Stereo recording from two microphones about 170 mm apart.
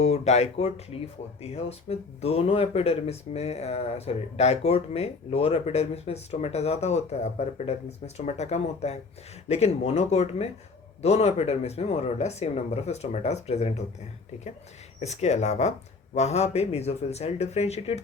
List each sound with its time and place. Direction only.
0.0 s speech: 40° left (ahead or behind)
15.0 s speech: 40° left (ahead or behind)